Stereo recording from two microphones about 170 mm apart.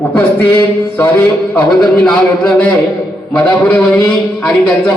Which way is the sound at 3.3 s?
10° left (ahead or behind).